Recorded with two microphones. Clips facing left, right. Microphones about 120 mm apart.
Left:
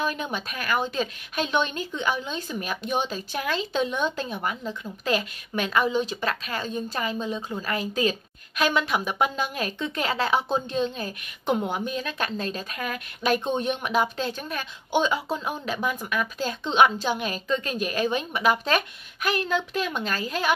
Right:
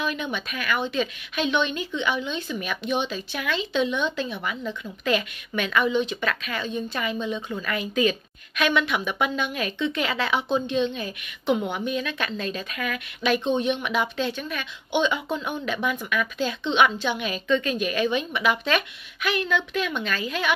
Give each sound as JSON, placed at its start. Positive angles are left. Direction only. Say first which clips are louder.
{"t": 0.0, "sound": "speech", "louder": "even", "side_deg": 40}